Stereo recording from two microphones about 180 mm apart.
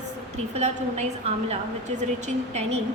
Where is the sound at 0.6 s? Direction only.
35° right (ahead or behind).